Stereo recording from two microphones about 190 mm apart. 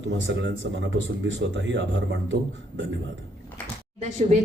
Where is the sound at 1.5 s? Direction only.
70° right (ahead or behind).